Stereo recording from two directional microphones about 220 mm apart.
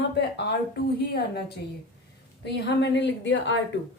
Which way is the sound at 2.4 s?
50° left (ahead or behind).